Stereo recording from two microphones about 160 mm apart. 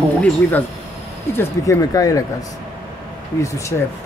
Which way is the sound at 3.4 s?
20° left (ahead or behind).